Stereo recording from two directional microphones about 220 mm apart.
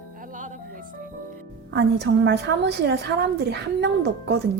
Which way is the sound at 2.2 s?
50° right (ahead or behind).